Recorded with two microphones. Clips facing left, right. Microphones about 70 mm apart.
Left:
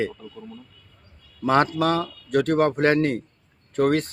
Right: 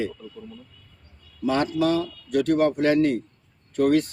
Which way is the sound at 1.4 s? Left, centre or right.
Left.